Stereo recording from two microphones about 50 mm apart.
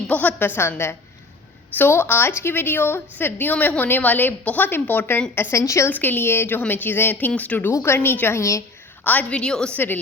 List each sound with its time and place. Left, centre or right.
0.1 s a woman's voice: left
0.8 s a woman's voice: left
1.7 s a woman's voice: left
5.5 s a woman's voice: left
5.9 s speech: left
6.6 s a woman's voice: left
7.7 s a woman's voice: left
9.0 s a woman's voice: left
9.4 s a woman's voice: centre
9.7 s a woman's voice: left